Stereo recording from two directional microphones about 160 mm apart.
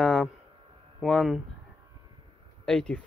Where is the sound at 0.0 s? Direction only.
5° left (ahead or behind).